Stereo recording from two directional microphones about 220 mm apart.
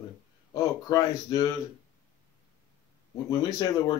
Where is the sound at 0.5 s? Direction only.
15° left (ahead or behind).